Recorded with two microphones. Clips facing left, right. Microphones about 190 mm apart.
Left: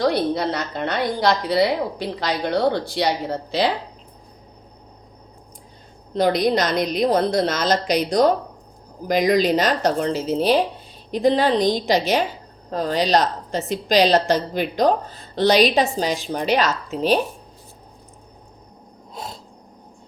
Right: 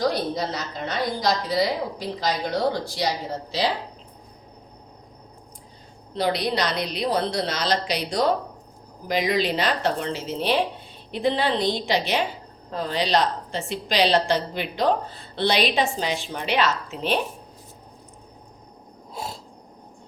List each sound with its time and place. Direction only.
0.0 s a woman's voice: 65° left (ahead or behind)
6.1 s a woman's voice: 45° left (ahead or behind)
19.1 s a sound: 5° right (ahead or behind)